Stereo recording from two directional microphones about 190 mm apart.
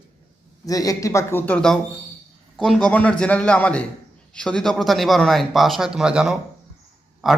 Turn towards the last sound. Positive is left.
turn(degrees=0)  # may be behind; listen again after turning